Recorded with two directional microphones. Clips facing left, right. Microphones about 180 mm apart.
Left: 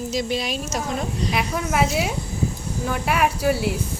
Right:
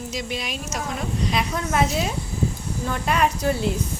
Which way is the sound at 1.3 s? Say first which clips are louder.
Left 1 dB; 10° left (ahead or behind).